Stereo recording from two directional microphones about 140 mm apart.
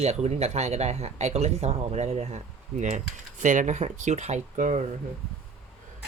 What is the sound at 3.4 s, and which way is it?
Speech, 65° right (ahead or behind).